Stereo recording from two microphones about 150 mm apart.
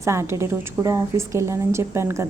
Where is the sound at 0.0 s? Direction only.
20° right (ahead or behind).